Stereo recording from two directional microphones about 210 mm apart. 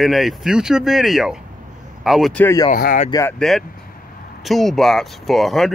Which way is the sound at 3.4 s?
Centre (ahead or behind).